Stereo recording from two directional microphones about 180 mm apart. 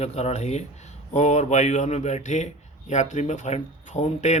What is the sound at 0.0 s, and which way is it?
Speech, 35° left (ahead or behind).